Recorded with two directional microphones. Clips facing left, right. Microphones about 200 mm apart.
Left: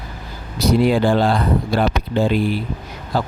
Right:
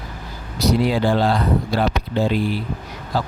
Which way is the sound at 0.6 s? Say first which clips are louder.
Left 3 dB; 55° left (ahead or behind).